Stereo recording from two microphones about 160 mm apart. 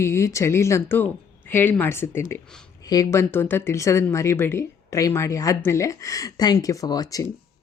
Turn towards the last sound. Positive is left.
turn(degrees=20)  # may be behind; listen again after turning